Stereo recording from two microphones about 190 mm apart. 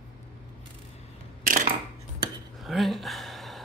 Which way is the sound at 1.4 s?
45° right (ahead or behind).